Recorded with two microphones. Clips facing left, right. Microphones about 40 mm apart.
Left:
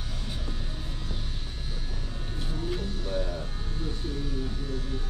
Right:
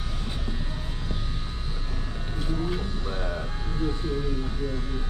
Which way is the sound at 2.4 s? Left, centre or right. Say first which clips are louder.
Right 4 dB; centre.